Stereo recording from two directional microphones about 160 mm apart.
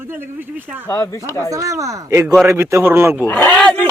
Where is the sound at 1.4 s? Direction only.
20° right (ahead or behind).